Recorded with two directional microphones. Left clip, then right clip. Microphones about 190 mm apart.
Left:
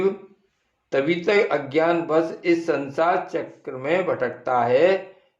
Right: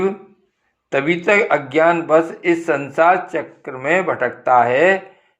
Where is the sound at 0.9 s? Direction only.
15° right (ahead or behind).